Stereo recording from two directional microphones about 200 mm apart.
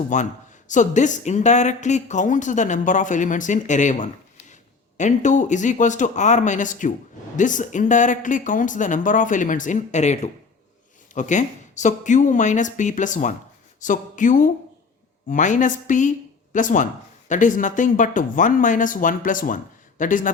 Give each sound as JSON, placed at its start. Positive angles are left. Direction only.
{"t": 0.1, "sound": "speech", "side_deg": 40}